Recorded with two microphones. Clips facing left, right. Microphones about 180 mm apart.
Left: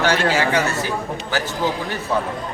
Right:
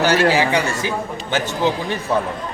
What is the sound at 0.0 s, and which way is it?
A man's voice, 10° right (ahead or behind).